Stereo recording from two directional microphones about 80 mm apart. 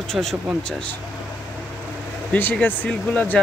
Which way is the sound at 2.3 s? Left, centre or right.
Left.